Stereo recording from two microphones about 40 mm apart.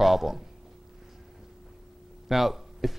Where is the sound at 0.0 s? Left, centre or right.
Centre.